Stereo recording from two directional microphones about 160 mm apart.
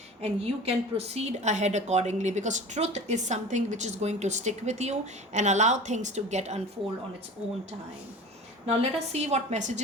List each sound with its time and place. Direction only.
0.2 s a woman's voice: 40° right (ahead or behind)
8.6 s a woman's voice: 40° right (ahead or behind)